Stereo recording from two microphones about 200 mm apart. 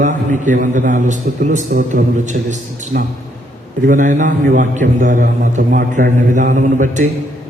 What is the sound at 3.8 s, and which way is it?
A man's voice, 40° right (ahead or behind).